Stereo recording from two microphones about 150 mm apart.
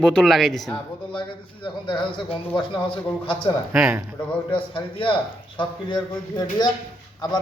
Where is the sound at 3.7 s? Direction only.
5° right (ahead or behind).